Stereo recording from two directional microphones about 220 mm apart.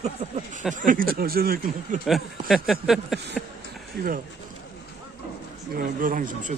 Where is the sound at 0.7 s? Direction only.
40° right (ahead or behind).